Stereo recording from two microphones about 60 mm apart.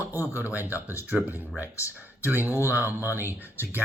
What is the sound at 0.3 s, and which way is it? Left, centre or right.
Speech, right.